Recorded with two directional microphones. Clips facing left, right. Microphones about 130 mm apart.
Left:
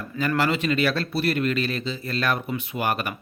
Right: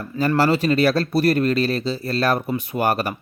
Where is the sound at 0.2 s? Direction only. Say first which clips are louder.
Right 5 dB; 35° right (ahead or behind).